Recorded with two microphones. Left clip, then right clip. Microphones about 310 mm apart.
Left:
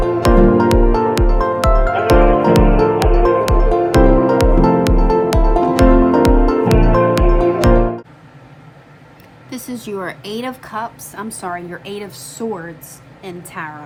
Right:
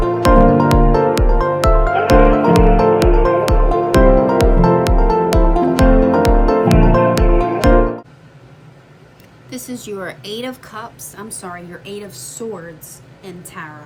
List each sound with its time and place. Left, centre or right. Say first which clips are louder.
0.0 s music: right 1 dB; centre
9.5 s a woman's voice: left 1 dB; centre